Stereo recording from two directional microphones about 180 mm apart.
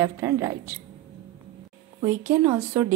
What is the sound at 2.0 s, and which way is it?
Speech, 15° right (ahead or behind).